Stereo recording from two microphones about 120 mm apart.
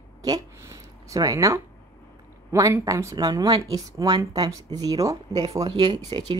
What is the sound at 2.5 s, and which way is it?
A woman's voice, 25° right (ahead or behind).